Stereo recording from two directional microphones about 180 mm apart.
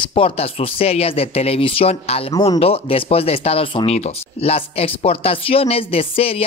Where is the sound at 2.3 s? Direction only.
20° left (ahead or behind).